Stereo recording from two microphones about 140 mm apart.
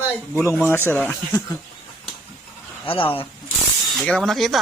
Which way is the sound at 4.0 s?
5° left (ahead or behind).